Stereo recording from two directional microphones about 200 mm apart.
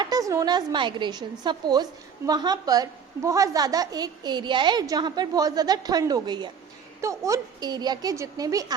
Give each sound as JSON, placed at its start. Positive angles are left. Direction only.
{"t": 0.0, "sound": "a woman's voice", "side_deg": -20}